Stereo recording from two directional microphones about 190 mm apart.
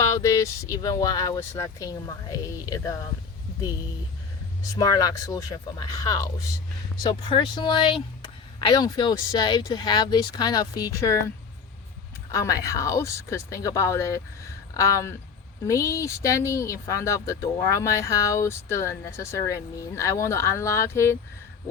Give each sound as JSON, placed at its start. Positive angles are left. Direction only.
{"t": 0.0, "sound": "speech", "side_deg": 15}
{"t": 4.8, "sound": "speech", "side_deg": 20}
{"t": 12.3, "sound": "speech", "side_deg": 15}